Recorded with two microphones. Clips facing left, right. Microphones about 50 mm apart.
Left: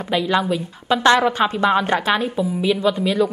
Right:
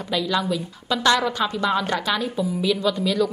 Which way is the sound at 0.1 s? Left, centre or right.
Left.